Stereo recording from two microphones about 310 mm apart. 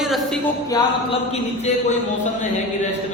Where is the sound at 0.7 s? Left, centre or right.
Centre.